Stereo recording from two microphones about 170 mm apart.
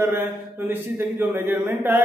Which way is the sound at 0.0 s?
10° right (ahead or behind).